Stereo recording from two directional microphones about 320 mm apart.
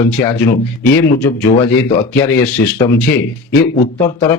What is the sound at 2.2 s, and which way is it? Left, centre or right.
Speech, centre.